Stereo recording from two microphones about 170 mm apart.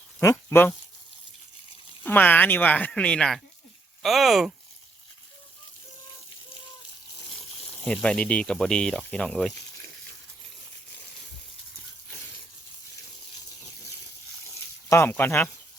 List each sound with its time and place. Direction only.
0.2 s speech: 15° left (ahead or behind)
2.0 s speech: 10° left (ahead or behind)
7.8 s speech: 5° left (ahead or behind)
14.8 s speech: 15° left (ahead or behind)